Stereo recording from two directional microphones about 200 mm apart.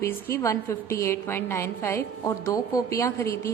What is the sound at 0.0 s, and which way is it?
A woman's voice, 10° left (ahead or behind).